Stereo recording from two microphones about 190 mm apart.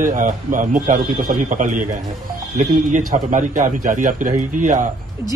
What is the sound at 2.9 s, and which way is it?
Speech, 40° right (ahead or behind).